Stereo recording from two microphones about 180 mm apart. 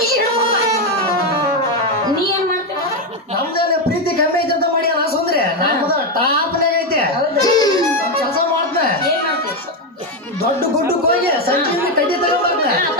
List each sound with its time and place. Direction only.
7.3 s music: 20° left (ahead or behind)